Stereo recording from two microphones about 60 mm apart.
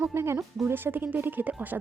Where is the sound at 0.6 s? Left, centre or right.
Right.